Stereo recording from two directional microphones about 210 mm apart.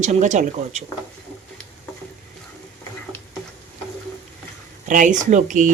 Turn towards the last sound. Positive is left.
turn(degrees=-35)  # may be behind; listen again after turning